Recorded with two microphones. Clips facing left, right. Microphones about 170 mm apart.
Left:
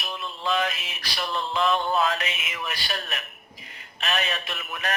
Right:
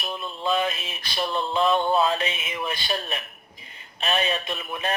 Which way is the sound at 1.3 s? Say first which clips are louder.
Right 2 dB; 25° right (ahead or behind).